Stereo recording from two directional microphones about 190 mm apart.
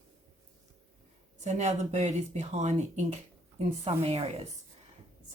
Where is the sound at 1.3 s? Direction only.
35° right (ahead or behind).